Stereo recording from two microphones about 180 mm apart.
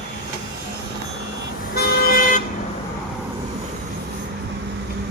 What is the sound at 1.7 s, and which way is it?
Vehicle, 60° left (ahead or behind).